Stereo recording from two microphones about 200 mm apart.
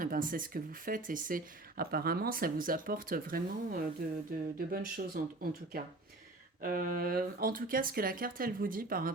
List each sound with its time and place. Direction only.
0.0 s speech: 45° right (ahead or behind)